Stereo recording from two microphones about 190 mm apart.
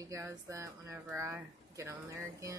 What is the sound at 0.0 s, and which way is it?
Speech, 15° right (ahead or behind).